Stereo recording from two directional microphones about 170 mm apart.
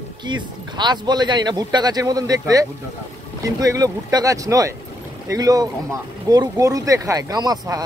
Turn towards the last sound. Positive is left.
turn(degrees=-25)  # may be behind; listen again after turning